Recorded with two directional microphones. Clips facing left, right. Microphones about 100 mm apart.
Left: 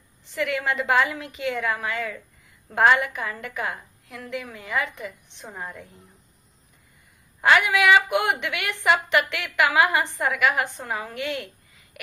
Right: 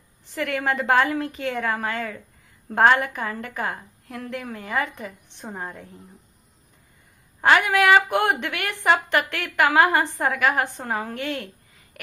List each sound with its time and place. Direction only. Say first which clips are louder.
0.3 s a woman's voice: right 1 dB; 45° right (ahead or behind)
7.4 s a woman's voice: right 1 dB; 40° right (ahead or behind)